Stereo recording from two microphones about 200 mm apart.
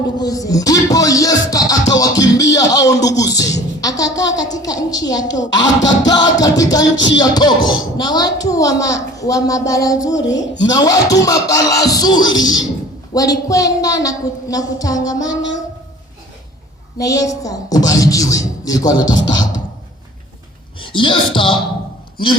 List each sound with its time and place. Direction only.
0.2 s a woman's voice: 20° left (ahead or behind)
5.6 s music: 65° left (ahead or behind)
6.1 s a woman's voice: 20° left (ahead or behind)
6.9 s music: 65° left (ahead or behind)
7.2 s a woman's voice: 20° left (ahead or behind)
17.0 s a woman's voice: 15° left (ahead or behind)
19.0 s speech: 70° left (ahead or behind)
20.8 s speech: 25° left (ahead or behind)